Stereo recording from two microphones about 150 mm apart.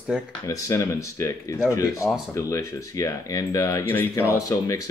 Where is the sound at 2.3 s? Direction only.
20° left (ahead or behind).